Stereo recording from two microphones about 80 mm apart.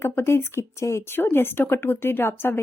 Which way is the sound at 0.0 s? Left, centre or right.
Left.